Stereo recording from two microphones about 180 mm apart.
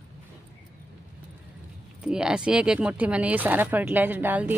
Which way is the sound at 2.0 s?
5° right (ahead or behind).